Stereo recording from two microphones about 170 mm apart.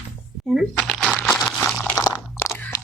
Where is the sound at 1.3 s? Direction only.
10° left (ahead or behind).